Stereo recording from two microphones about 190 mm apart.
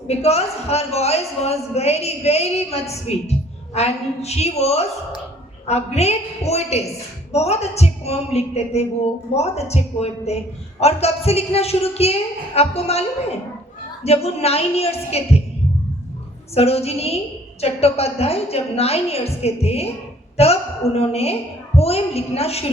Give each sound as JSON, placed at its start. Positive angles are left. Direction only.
{"t": 0.1, "sound": "a man's voice", "side_deg": 35}
{"t": 16.6, "sound": "a man's voice", "side_deg": 35}